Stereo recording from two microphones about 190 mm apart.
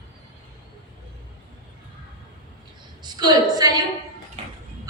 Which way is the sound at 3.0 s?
20° right (ahead or behind).